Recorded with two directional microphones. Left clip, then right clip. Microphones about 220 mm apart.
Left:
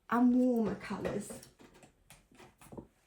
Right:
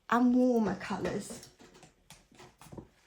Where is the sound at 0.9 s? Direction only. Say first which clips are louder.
Right 4 dB; 35° right (ahead or behind).